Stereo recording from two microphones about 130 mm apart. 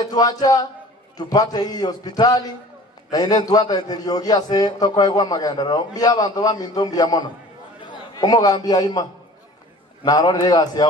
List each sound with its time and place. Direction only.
0.1 s a man's voice: 30° left (ahead or behind)
10.0 s a man's voice: 30° left (ahead or behind)